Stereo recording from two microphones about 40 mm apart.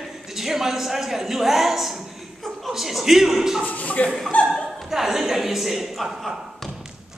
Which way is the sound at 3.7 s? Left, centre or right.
Left.